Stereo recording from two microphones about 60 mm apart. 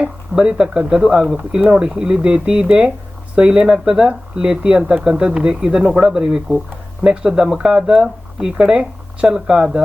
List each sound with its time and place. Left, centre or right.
0.0 s speech: centre